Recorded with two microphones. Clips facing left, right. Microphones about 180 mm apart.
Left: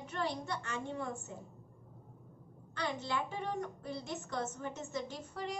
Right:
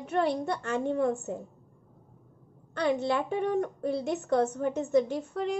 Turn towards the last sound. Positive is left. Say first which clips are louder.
# right 11 dB
turn(degrees=-60)  # may be behind; listen again after turning